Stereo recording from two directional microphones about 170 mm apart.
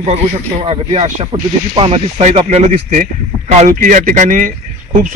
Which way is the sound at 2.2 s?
40° right (ahead or behind).